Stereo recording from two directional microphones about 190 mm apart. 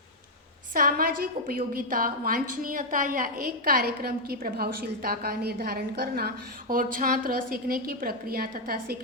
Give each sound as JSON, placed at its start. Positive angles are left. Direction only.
{"t": 0.7, "sound": "a woman's voice", "side_deg": -50}